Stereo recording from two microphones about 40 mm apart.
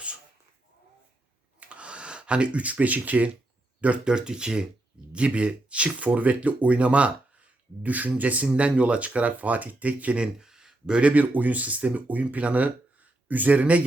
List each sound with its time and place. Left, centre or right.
1.5 s a sound: right
3.8 s speech: right
4.0 s speech: right
5.1 s speech: right
10.3 s a sound: centre
10.9 s speech: right